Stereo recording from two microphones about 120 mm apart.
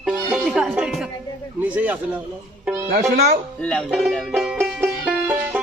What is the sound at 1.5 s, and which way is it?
Speech, 15° right (ahead or behind).